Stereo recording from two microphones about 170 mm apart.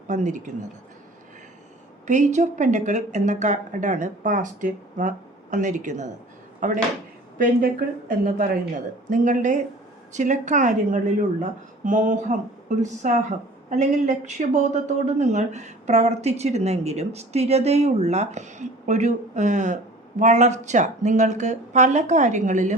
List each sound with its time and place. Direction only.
0.1 s speech: 45° right (ahead or behind)
2.0 s speech: 45° right (ahead or behind)
8.2 s speech: 55° right (ahead or behind)